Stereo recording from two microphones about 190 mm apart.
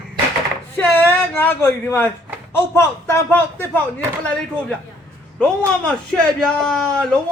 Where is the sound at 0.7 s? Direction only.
10° left (ahead or behind).